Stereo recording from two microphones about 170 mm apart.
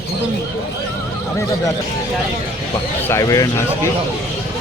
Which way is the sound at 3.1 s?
20° left (ahead or behind).